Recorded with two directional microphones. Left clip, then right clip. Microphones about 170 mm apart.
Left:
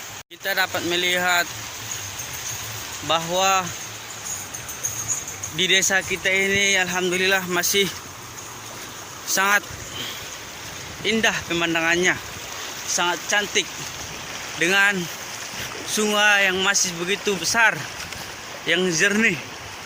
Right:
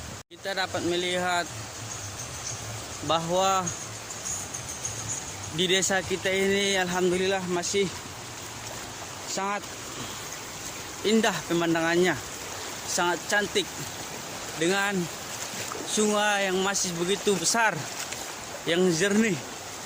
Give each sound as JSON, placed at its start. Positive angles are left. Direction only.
{"t": 0.4, "sound": "speech", "side_deg": -5}
{"t": 3.1, "sound": "speech", "side_deg": -15}
{"t": 5.5, "sound": "speech", "side_deg": -25}
{"t": 7.2, "sound": "speech", "side_deg": -5}
{"t": 9.3, "sound": "speech", "side_deg": 5}
{"t": 11.0, "sound": "speech", "side_deg": -30}
{"t": 14.6, "sound": "speech", "side_deg": -10}